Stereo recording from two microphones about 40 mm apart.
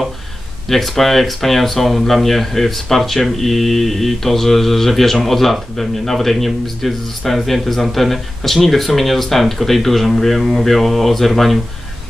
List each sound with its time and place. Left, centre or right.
0.7 s speech: centre